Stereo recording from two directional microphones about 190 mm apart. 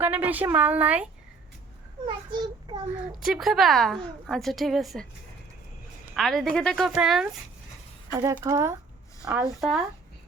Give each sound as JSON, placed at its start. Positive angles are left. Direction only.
{"t": 0.0, "sound": "speech", "side_deg": -10}
{"t": 2.0, "sound": "a child's voice", "side_deg": -25}
{"t": 3.2, "sound": "a woman's voice", "side_deg": 0}
{"t": 6.1, "sound": "a woman's voice", "side_deg": 0}
{"t": 8.1, "sound": "speech", "side_deg": -15}
{"t": 9.2, "sound": "a woman's voice", "side_deg": -5}